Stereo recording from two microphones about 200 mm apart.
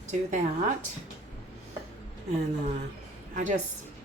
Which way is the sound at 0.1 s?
40° right (ahead or behind).